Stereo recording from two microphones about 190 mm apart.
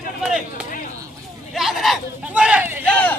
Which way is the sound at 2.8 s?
10° left (ahead or behind).